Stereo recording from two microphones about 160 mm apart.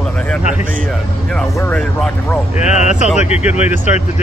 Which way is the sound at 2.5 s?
45° left (ahead or behind).